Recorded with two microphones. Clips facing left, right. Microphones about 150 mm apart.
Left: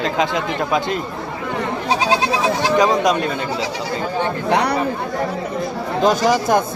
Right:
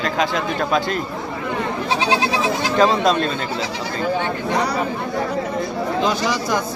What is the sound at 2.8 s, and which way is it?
Speech, 15° left (ahead or behind).